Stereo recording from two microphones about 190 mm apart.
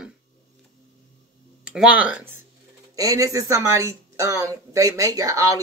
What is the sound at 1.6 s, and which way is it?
Speech, 5° right (ahead or behind).